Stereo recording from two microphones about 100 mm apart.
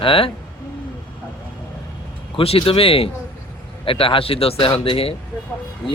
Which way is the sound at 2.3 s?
70° left (ahead or behind).